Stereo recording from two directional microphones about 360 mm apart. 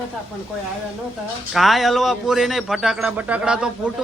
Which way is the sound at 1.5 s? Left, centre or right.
Centre.